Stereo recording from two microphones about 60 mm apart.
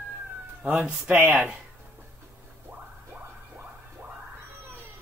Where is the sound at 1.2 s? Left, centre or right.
Right.